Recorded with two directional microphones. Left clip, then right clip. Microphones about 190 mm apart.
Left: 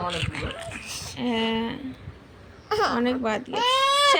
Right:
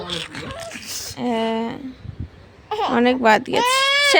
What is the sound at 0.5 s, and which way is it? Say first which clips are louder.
Speech: right 3 dB; 35° right (ahead or behind).